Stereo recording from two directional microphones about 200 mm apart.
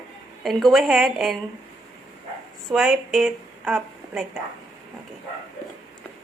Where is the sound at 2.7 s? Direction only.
Centre (ahead or behind).